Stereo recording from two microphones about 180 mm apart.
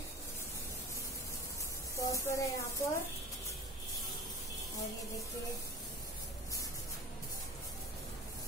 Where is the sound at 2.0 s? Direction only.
15° left (ahead or behind).